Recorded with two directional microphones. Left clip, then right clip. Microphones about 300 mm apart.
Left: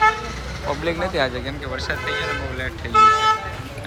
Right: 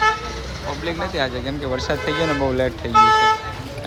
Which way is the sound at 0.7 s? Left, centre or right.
Centre.